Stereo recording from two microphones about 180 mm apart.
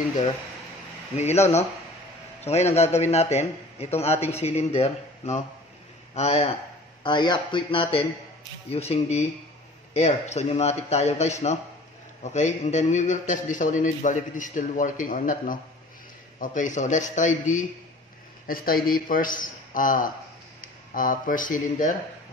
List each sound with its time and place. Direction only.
1.1 s a man's voice: 35° left (ahead or behind)
7.0 s a man's voice: 25° left (ahead or behind); by 21.9 s 45° left (ahead or behind)